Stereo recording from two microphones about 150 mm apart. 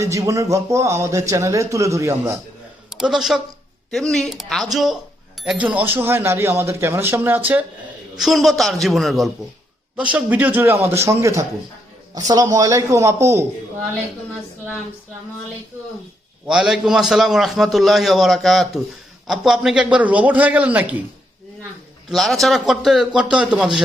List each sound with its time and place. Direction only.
0.0 s a man's voice: 20° right (ahead or behind)
2.9 s a man's voice: 5° right (ahead or behind)
8.1 s a man's voice: centre (ahead or behind); by 13.4 s 20° right (ahead or behind)
16.5 s a man's voice: 5° right (ahead or behind)
22.1 s a man's voice: centre (ahead or behind)